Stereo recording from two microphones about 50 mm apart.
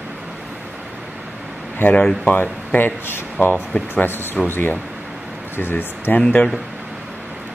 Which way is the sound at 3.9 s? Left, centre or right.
Left.